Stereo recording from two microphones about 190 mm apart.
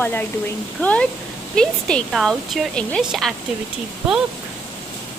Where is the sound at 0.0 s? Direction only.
10° left (ahead or behind).